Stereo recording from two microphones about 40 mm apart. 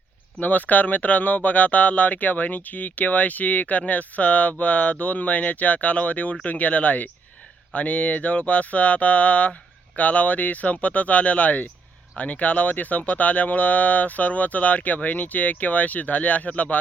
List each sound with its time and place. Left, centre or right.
0.3 s speech: left